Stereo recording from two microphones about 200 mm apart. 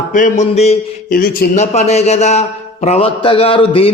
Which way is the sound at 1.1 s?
45° left (ahead or behind).